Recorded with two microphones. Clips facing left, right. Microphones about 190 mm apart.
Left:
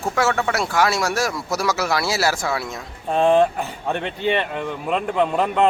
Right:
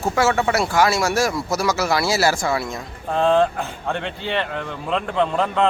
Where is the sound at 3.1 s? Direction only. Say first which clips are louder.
Left 1 dB; 15° left (ahead or behind).